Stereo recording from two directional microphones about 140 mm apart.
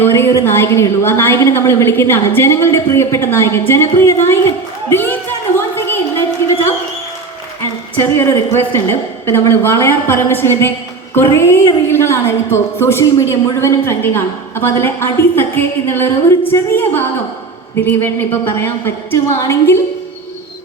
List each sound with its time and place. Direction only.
0.0 s a woman's voice: 20° left (ahead or behind)
5.5 s a sound: 15° left (ahead or behind)
8.0 s a woman's voice: 15° left (ahead or behind)